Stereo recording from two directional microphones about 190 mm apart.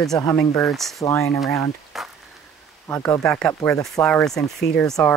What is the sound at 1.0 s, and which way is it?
Speech, 15° left (ahead or behind).